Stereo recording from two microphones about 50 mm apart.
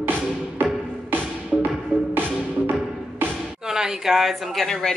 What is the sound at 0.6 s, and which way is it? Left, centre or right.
Music, right.